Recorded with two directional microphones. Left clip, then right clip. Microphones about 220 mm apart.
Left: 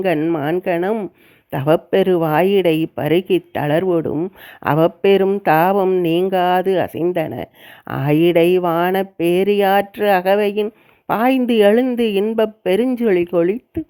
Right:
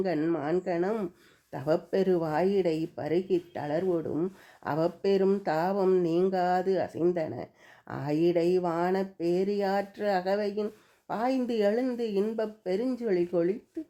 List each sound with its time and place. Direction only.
0.0 s speech: 30° left (ahead or behind)